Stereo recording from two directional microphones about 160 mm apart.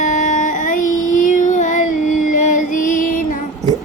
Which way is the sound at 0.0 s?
50° left (ahead or behind).